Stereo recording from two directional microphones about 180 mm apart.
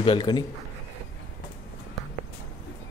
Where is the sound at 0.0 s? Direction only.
25° left (ahead or behind).